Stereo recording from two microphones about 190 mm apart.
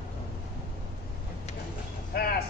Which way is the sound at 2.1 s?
55° left (ahead or behind).